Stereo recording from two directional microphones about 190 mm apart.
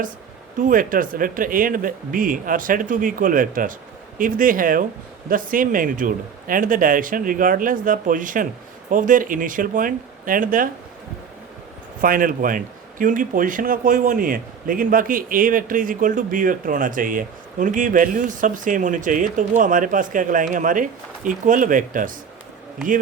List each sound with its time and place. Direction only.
0.6 s speech: 45° right (ahead or behind)
12.0 s speech: 45° right (ahead or behind)